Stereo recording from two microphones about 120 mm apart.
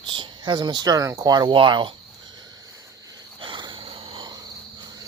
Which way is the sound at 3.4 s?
40° right (ahead or behind).